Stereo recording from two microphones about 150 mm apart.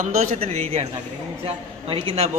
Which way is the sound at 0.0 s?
65° right (ahead or behind).